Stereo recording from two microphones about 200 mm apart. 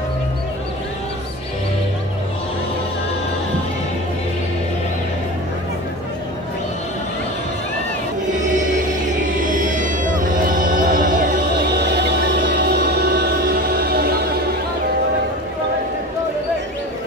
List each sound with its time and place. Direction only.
8.4 s music: 40° right (ahead or behind)